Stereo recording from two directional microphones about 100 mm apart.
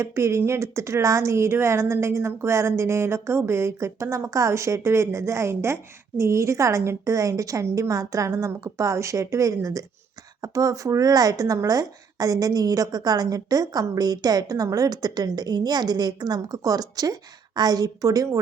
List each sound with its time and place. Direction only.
0.0 s a woman's voice: 30° right (ahead or behind)